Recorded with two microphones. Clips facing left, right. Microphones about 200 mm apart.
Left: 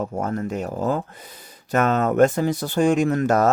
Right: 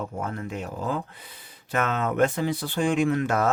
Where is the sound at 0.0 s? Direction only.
45° left (ahead or behind).